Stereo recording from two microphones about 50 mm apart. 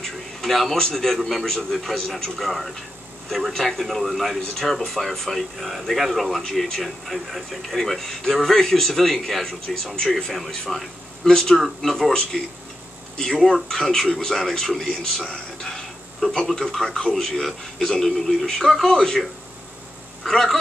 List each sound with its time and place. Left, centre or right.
0.0 s a man's voice: centre
20.2 s a man's voice: centre